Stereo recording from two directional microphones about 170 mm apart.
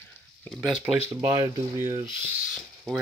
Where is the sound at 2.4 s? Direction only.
Centre (ahead or behind).